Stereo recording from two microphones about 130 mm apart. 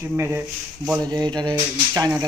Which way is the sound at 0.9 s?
30° right (ahead or behind).